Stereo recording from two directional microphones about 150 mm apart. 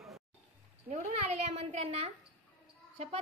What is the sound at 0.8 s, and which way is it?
A child's voice, 45° right (ahead or behind).